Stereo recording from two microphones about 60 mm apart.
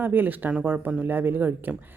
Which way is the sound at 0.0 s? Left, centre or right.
Right.